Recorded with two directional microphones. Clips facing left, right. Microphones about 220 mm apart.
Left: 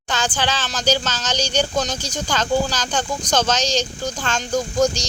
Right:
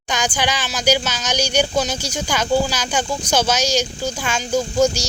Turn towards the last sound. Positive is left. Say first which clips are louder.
# right 2 dB
turn(degrees=-10)  # may be behind; listen again after turning